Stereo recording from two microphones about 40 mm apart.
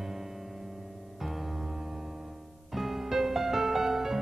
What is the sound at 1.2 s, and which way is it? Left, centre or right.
Music, centre.